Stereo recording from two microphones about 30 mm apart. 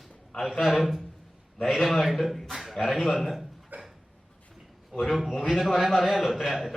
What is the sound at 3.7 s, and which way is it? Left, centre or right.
Dog, right.